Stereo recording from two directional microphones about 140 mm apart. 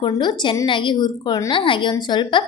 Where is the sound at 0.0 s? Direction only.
30° left (ahead or behind).